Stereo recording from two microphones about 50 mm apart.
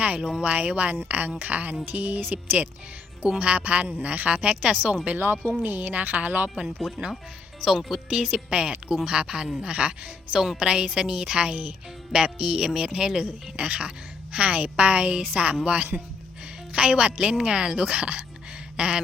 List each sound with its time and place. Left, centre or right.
0.0 s a woman's voice: right
0.5 s a woman's voice: right
5.4 s speech: right
5.8 s a woman's voice: right
6.9 s speech: centre
8.1 s a woman's voice: centre